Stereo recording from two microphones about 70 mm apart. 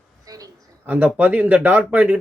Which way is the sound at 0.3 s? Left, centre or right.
Right.